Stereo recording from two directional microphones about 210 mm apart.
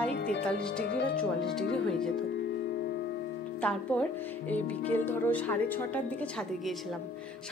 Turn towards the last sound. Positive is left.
turn(degrees=10)  # may be behind; listen again after turning